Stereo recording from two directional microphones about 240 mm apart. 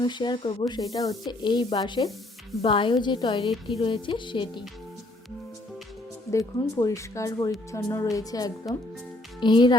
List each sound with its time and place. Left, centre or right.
0.0 s a woman's voice: centre
0.7 s sanding: centre
2.6 s a woman's voice: left
6.3 s sanding: centre
9.4 s a woman's voice: centre